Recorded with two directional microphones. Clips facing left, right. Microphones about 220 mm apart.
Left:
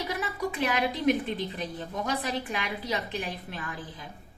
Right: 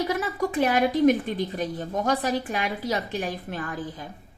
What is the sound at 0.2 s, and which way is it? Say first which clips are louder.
A woman's voice: right 6 dB; 45° right (ahead or behind).